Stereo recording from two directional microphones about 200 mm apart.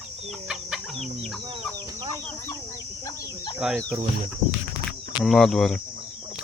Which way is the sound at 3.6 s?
Centre (ahead or behind).